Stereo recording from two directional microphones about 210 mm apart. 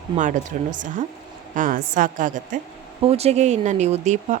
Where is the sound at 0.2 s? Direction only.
35° right (ahead or behind).